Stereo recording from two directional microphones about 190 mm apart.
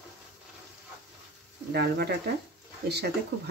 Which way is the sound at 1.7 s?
55° right (ahead or behind).